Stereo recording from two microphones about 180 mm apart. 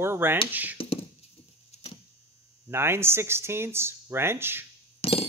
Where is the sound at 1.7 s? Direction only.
35° left (ahead or behind).